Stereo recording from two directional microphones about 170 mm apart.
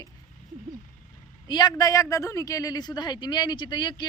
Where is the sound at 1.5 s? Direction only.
25° left (ahead or behind).